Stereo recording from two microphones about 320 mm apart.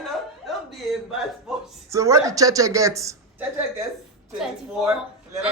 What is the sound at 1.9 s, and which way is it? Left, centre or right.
Speech, centre.